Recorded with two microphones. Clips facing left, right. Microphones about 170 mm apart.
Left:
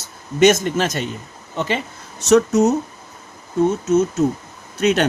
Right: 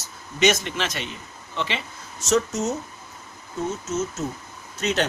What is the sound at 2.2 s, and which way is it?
Speech, 65° left (ahead or behind).